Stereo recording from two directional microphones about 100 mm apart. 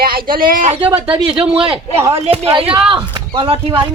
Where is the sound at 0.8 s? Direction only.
65° right (ahead or behind).